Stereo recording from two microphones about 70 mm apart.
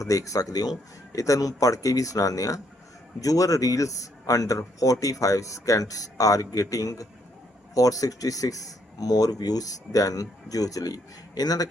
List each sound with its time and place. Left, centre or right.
0.0 s speech: left